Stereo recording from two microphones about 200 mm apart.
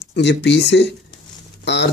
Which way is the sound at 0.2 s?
60° left (ahead or behind).